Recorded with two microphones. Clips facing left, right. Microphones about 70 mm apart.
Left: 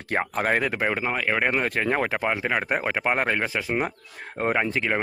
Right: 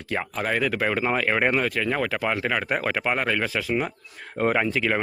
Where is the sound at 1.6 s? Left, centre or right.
Left.